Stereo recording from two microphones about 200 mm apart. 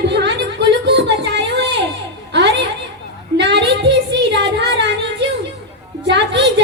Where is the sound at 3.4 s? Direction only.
60° right (ahead or behind).